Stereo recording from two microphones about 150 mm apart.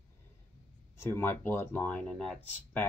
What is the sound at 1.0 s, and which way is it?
Speech, 15° left (ahead or behind).